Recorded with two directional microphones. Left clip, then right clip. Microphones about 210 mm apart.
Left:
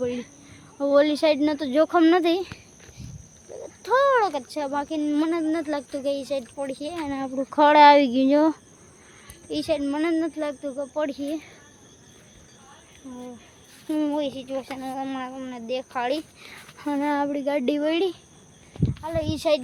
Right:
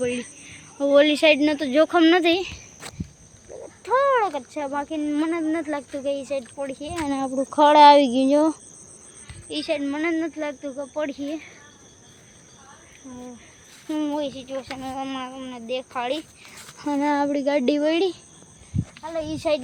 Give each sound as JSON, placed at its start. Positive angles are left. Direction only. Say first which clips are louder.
{"t": 0.0, "sound": "speech", "louder": "right 2 dB", "side_deg": 0}
{"t": 3.5, "sound": "frog", "louder": "left 1 dB", "side_deg": 0}
{"t": 3.8, "sound": "speech", "louder": "even", "side_deg": 15}
{"t": 7.0, "sound": "speech", "louder": "right 6 dB", "side_deg": -10}
{"t": 7.5, "sound": "speech", "louder": "right 2 dB", "side_deg": 0}
{"t": 9.5, "sound": "speech", "louder": "even", "side_deg": 15}
{"t": 13.8, "sound": "speech", "louder": "left 1 dB", "side_deg": 15}
{"t": 16.7, "sound": "a sound", "louder": "right 2 dB", "side_deg": 5}
{"t": 17.0, "sound": "speech", "louder": "right 3 dB", "side_deg": -5}